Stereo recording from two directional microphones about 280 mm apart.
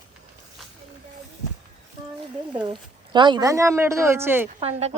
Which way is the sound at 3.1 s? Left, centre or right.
Centre.